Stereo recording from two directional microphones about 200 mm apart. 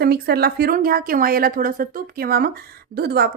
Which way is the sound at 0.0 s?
50° right (ahead or behind).